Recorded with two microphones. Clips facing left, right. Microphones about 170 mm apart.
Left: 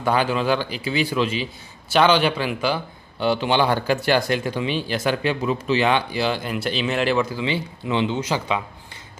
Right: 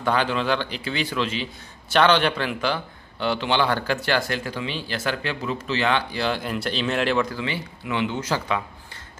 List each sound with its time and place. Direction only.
0.0 s a man's voice: 10° left (ahead or behind)
6.2 s speech: centre (ahead or behind)
7.3 s speech: 20° left (ahead or behind)